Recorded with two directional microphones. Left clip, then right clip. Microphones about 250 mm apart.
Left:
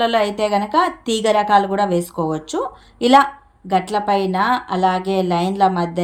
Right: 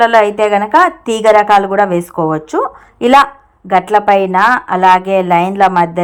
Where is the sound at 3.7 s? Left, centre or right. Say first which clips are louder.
Right 8 dB; right.